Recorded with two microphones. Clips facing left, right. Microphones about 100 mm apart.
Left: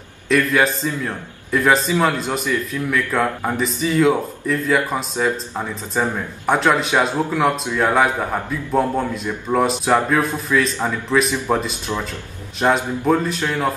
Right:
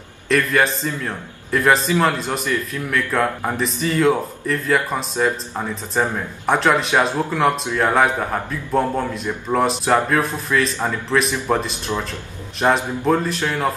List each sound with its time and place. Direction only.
0.3 s a man's voice: centre (ahead or behind)